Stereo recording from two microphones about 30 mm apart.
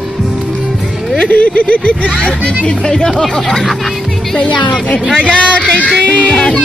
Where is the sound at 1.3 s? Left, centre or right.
Left.